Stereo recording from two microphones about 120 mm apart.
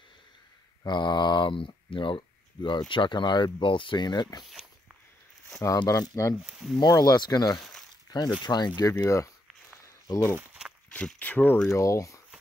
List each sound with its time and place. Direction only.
0.8 s speech: 40° left (ahead or behind)
5.8 s speech: 30° left (ahead or behind)
6.4 s speech: 5° right (ahead or behind)
6.8 s speech: 30° left (ahead or behind)
9.8 s a sound: 25° left (ahead or behind)
10.3 s walk: 5° right (ahead or behind)
10.9 s speech: 10° left (ahead or behind)
11.7 s speech: 25° left (ahead or behind)